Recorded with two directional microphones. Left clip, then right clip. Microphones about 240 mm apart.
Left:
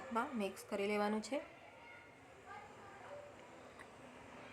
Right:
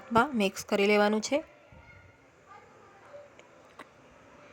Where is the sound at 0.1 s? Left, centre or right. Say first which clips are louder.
Right 15 dB; right.